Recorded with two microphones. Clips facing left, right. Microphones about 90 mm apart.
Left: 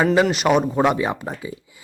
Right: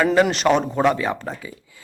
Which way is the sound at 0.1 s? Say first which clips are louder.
Even; 5° left (ahead or behind).